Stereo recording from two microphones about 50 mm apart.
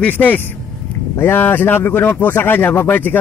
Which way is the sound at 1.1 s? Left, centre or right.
Left.